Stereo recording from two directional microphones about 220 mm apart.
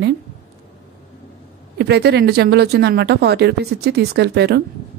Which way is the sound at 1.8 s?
50° right (ahead or behind).